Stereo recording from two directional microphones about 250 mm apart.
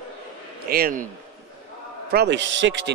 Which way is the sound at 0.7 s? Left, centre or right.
Right.